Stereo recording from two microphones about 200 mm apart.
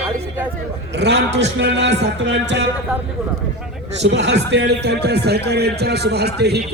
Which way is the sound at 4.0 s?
60° right (ahead or behind).